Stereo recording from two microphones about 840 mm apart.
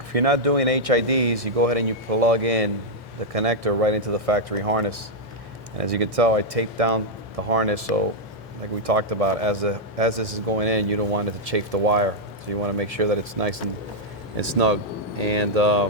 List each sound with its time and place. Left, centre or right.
0.1 s speech: right